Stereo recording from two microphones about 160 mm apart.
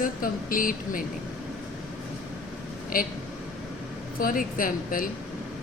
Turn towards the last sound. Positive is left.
turn(degrees=60)  # may be behind; listen again after turning